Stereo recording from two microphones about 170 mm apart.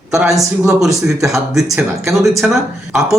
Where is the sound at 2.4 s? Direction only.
Centre (ahead or behind).